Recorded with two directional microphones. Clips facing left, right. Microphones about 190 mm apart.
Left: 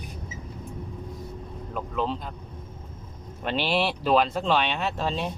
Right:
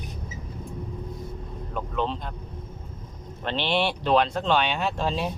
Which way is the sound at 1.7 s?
5° left (ahead or behind).